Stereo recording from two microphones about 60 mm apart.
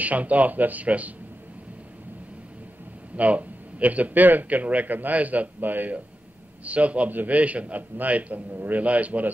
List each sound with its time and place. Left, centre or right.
0.0 s a man's voice: right
3.2 s a man's voice: right